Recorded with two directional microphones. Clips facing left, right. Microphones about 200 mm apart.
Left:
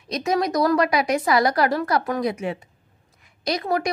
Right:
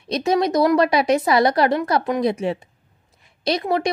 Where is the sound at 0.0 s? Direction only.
30° right (ahead or behind).